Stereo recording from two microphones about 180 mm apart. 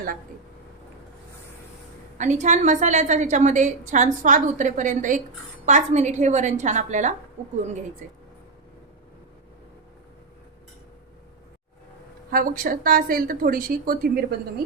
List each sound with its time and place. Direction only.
2.1 s a woman's voice: 40° right (ahead or behind)
12.3 s a woman's voice: 50° right (ahead or behind)